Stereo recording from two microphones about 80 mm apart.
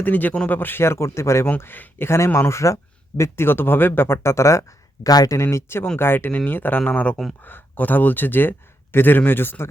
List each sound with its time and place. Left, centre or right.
0.0 s speech: left
1.5 s speech: left
5.0 s speech: left